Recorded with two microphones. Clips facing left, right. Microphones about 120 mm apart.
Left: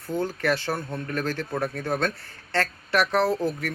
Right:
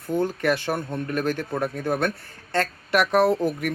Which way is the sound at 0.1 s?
15° right (ahead or behind).